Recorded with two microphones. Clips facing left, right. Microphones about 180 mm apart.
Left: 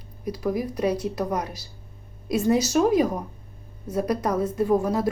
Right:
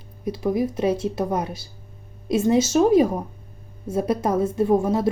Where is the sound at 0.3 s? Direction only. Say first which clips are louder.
Right 4 dB; 25° right (ahead or behind).